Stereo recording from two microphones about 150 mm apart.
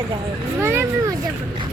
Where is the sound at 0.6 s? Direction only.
15° right (ahead or behind).